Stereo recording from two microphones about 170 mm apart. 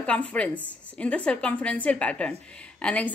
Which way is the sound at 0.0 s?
5° left (ahead or behind).